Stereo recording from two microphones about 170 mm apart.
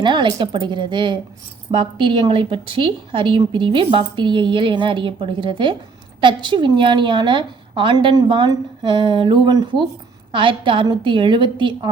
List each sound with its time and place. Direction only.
0.0 s a woman's voice: 25° right (ahead or behind)